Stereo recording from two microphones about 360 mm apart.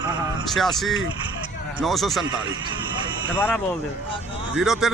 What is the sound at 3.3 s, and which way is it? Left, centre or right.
Speech, centre.